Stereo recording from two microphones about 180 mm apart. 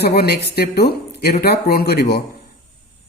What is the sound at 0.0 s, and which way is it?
Speech, 60° left (ahead or behind).